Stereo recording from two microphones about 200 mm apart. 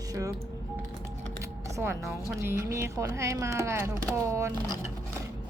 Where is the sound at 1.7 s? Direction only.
15° right (ahead or behind).